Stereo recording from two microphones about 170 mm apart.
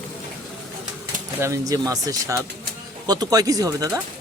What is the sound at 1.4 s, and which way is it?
Speech, 20° right (ahead or behind).